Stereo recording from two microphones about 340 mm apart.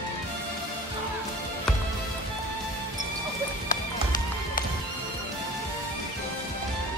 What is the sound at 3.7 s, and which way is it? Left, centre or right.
Music, left.